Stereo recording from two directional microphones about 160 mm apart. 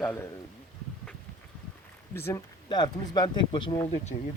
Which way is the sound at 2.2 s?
15° left (ahead or behind).